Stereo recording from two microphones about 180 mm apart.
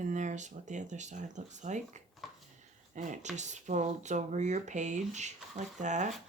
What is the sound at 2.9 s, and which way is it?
Speech, 45° right (ahead or behind).